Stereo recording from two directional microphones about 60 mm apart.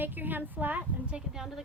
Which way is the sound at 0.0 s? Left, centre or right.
Right.